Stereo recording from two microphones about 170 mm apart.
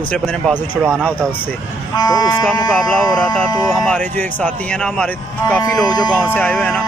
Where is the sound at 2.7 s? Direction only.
5° left (ahead or behind).